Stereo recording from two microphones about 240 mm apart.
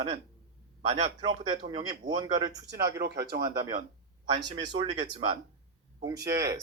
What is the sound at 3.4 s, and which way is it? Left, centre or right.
Speech, centre.